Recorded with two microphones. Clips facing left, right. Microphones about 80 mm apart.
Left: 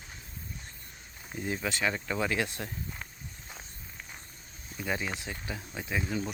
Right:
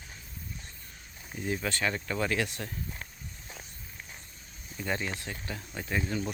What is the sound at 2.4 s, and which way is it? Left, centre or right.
Speech, left.